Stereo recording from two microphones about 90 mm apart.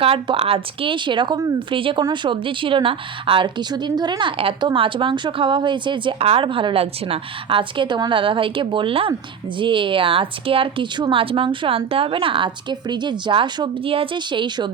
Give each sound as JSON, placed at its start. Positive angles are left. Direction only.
{"t": 0.0, "sound": "a woman's voice", "side_deg": -90}
{"t": 1.5, "sound": "a woman's voice", "side_deg": -75}
{"t": 9.6, "sound": "a woman's voice", "side_deg": -65}
{"t": 11.1, "sound": "a woman's voice", "side_deg": -85}